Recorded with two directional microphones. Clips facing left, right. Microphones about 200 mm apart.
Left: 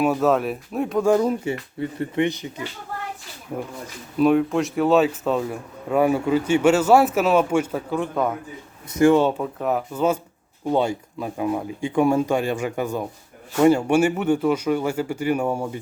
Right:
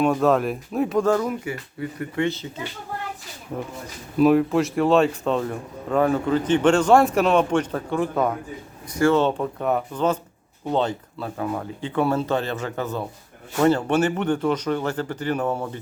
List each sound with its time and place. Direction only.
0.0 s a man's voice: 5° left (ahead or behind)
1.2 s speech: 25° left (ahead or behind)
4.2 s a man's voice: centre (ahead or behind)
8.9 s speech: 15° left (ahead or behind)
9.4 s a man's voice: centre (ahead or behind)